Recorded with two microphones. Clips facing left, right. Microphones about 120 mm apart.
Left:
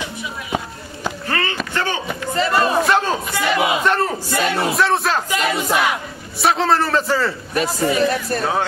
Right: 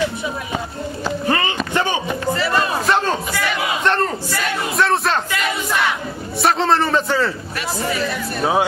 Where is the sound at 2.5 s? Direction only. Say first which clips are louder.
Left 4 dB; 5° left (ahead or behind).